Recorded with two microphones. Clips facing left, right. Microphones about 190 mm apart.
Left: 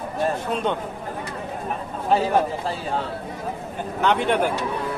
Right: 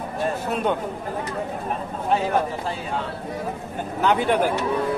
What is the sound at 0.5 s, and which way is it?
Speech, 10° right (ahead or behind).